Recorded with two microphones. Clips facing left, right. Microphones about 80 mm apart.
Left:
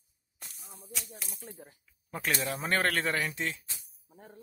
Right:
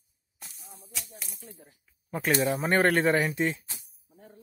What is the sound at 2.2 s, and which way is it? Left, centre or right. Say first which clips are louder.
Speech: right 7 dB; centre.